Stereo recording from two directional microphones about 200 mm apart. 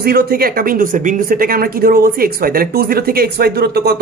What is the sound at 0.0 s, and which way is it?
Speech, 50° right (ahead or behind).